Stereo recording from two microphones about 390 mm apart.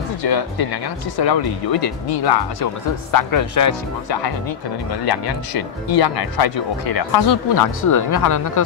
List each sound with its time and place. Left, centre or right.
0.2 s speech: left
2.2 s speech: left
5.0 s speech: left